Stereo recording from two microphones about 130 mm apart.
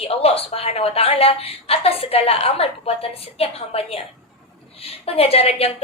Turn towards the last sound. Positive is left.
turn(degrees=50)  # may be behind; listen again after turning